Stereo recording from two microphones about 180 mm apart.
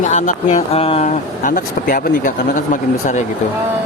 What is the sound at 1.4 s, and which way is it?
Speech, 50° left (ahead or behind).